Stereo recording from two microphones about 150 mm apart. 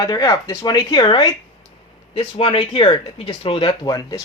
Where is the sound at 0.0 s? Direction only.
25° left (ahead or behind).